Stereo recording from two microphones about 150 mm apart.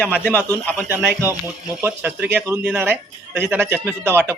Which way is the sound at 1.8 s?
10° right (ahead or behind).